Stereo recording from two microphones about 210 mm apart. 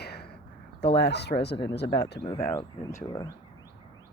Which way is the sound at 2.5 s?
10° left (ahead or behind).